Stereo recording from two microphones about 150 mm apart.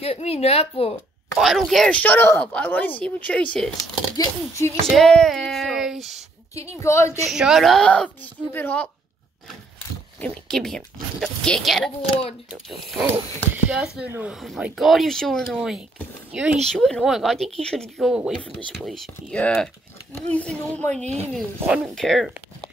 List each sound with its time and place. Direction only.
0.0 s a woman's voice: 45° left (ahead or behind)
1.4 s speech: centre (ahead or behind)
4.2 s speech: 20° left (ahead or behind)
4.8 s speech: 5° left (ahead or behind)
6.8 s speech: 20° left (ahead or behind)
7.2 s speech: centre (ahead or behind); by 8.8 s 15° left (ahead or behind)
10.2 s speech: 5° left (ahead or behind)
13.0 s speech: 15° right (ahead or behind)
19.3 s speech: 5° left (ahead or behind)
21.0 s speech: 50° right (ahead or behind)
21.6 s speech: 10° right (ahead or behind)
21.9 s speech: centre (ahead or behind)